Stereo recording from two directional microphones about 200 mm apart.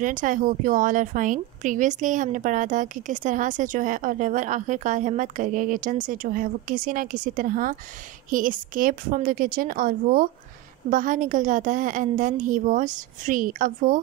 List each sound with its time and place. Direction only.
0.0 s a woman's voice: 40° right (ahead or behind)